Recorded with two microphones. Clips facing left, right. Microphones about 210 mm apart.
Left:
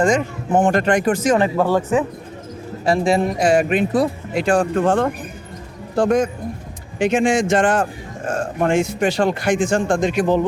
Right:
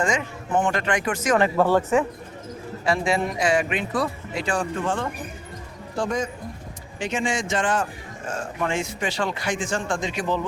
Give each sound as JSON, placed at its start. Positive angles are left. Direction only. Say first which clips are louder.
{"t": 0.0, "sound": "speech", "louder": "left 7 dB", "side_deg": 40}
{"t": 1.4, "sound": "speech", "louder": "left 2 dB", "side_deg": 10}
{"t": 2.8, "sound": "speech", "louder": "left 6 dB", "side_deg": 35}
{"t": 4.4, "sound": "speech", "louder": "left 9 dB", "side_deg": 50}